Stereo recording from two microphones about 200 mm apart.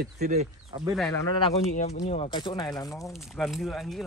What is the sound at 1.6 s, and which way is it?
Speech, 35° left (ahead or behind).